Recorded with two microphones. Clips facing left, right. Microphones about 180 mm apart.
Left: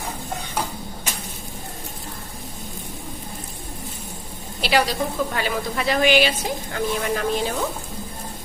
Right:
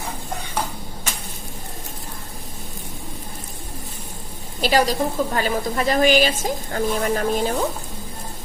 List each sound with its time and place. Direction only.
4.6 s a woman's voice: 45° right (ahead or behind)